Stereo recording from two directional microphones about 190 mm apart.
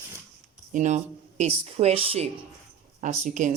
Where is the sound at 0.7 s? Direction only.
40° right (ahead or behind).